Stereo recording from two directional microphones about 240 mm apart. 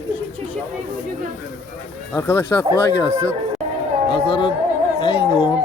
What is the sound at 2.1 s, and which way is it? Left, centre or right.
Speech, centre.